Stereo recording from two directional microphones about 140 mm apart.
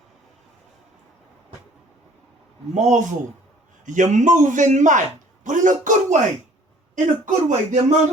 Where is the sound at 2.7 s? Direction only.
55° right (ahead or behind).